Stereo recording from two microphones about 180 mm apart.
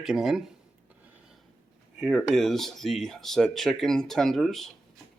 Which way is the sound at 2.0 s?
Centre (ahead or behind).